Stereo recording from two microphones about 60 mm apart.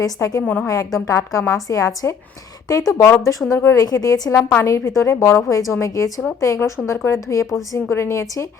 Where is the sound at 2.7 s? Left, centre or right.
Left.